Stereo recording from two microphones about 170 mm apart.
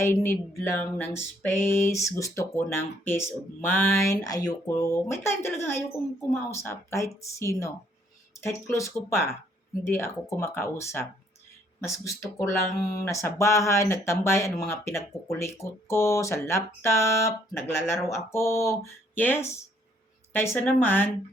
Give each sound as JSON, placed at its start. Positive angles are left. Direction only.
{"t": 0.0, "sound": "music", "side_deg": 15}